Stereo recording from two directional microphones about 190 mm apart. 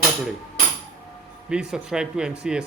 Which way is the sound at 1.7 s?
5° right (ahead or behind).